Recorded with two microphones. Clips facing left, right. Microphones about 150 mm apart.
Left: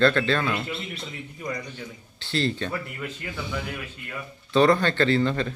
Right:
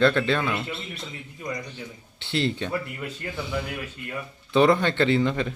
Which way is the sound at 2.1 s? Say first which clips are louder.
Even; 20° right (ahead or behind).